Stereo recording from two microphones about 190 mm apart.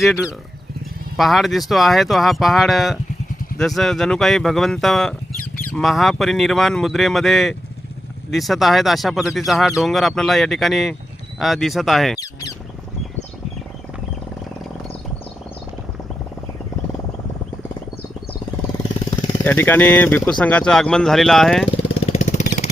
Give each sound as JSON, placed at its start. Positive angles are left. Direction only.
{"t": 0.0, "sound": "speech", "side_deg": 0}
{"t": 12.2, "sound": "speech", "side_deg": 20}
{"t": 19.5, "sound": "speech", "side_deg": 10}
{"t": 22.0, "sound": "a sound", "side_deg": 35}